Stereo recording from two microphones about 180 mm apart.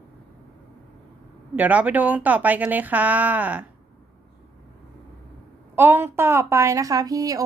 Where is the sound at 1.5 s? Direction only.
10° right (ahead or behind).